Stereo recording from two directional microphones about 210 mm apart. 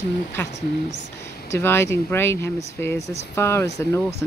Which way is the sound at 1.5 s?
10° left (ahead or behind).